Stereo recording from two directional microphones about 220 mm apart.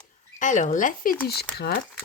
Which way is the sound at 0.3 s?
35° left (ahead or behind).